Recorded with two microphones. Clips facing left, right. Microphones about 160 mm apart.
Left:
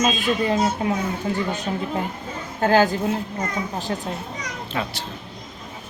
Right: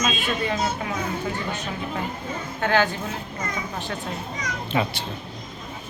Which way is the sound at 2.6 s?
35° left (ahead or behind).